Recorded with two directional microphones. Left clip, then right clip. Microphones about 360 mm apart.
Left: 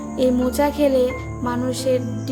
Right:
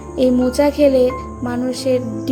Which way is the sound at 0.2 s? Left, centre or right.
Centre.